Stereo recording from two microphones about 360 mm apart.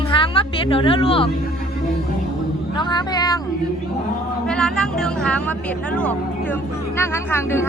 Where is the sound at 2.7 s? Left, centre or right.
Centre.